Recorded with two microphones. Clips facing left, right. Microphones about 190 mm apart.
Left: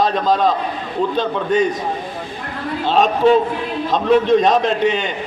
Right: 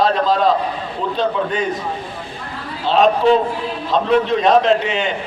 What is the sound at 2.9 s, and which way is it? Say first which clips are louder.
Speech: right 2 dB; 45° left (ahead or behind).